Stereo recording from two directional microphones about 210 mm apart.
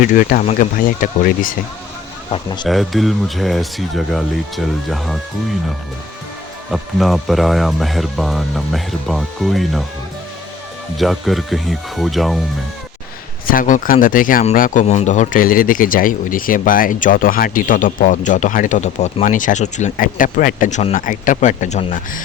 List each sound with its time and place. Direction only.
0.0 s speech: 40° left (ahead or behind)
2.6 s speech: centre (ahead or behind)
6.7 s speech: centre (ahead or behind)
10.9 s speech: centre (ahead or behind)
13.5 s speech: 40° left (ahead or behind)